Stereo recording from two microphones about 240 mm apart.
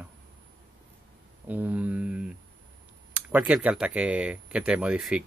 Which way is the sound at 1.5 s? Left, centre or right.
Centre.